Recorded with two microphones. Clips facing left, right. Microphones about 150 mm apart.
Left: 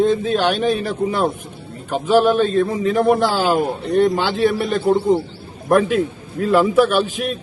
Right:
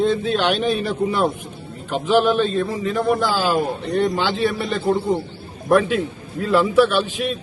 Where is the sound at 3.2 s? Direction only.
60° left (ahead or behind).